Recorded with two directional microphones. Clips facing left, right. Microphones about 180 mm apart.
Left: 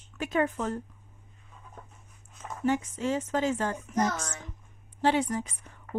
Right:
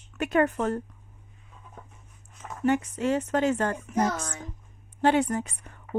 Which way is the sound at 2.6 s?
65° right (ahead or behind).